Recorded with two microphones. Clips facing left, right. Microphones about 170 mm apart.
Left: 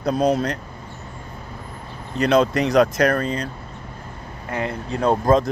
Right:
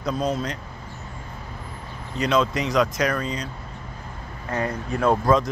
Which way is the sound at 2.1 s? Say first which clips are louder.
Left 5 dB; 60° left (ahead or behind).